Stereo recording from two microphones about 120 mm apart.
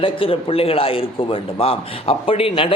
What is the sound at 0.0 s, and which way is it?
Speech, 50° left (ahead or behind).